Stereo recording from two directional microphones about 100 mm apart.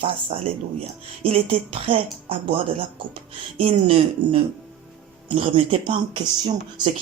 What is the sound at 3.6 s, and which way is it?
Speech, 80° right.